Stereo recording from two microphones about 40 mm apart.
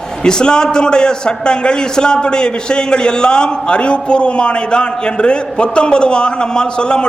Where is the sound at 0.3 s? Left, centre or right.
Centre.